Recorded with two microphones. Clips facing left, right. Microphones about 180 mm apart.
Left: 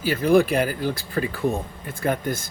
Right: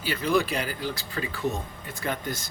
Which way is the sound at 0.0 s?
50° left (ahead or behind).